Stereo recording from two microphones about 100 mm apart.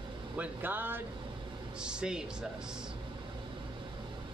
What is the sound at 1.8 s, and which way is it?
Speech, 10° right (ahead or behind).